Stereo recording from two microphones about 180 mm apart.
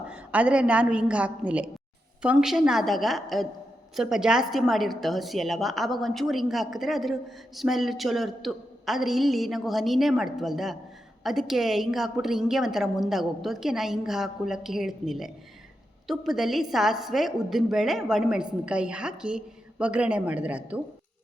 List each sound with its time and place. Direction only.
0.1 s a woman's voice: 10° right (ahead or behind)